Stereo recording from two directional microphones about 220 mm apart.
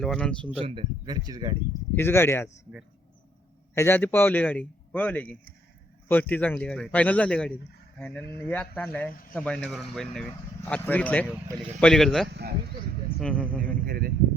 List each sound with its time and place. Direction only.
0.0 s speech: 5° left (ahead or behind)
0.6 s speech: 25° right (ahead or behind)
2.0 s a man's voice: 10° left (ahead or behind)
3.8 s a man's voice: 10° left (ahead or behind)
12.3 s speech: 50° right (ahead or behind)
13.1 s speech: 5° left (ahead or behind)
13.6 s speech: 40° right (ahead or behind)